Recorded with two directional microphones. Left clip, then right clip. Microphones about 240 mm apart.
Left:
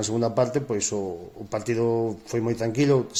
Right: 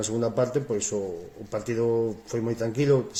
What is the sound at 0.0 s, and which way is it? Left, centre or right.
Speech, left.